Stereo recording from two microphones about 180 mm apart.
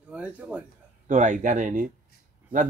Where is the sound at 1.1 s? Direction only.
45° right (ahead or behind).